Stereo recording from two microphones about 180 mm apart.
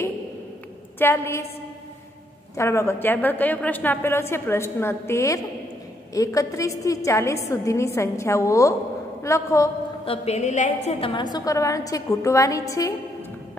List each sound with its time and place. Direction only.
0.9 s a woman's voice: 10° left (ahead or behind)
2.5 s a woman's voice: 15° left (ahead or behind)
10.0 s a woman's voice: 35° left (ahead or behind)
10.9 s a woman's voice: 30° left (ahead or behind)